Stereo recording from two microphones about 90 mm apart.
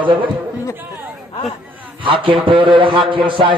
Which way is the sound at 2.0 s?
75° right (ahead or behind).